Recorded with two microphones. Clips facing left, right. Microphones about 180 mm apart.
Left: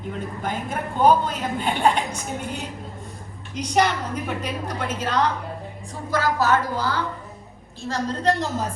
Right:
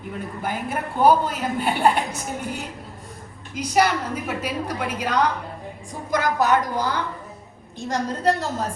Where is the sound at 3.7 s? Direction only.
5° right (ahead or behind).